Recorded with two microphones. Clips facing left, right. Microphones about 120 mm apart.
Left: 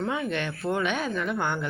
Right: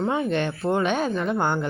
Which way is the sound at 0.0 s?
30° right (ahead or behind).